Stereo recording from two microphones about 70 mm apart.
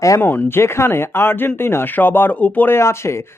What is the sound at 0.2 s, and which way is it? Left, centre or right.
Speech, left.